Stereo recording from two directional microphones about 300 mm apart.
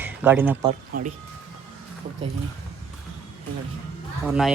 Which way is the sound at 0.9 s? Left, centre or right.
Right.